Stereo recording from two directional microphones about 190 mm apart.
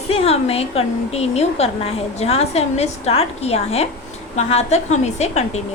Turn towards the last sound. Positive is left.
turn(degrees=35)  # may be behind; listen again after turning